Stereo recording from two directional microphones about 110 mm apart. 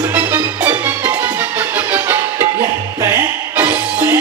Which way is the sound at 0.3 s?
20° right (ahead or behind).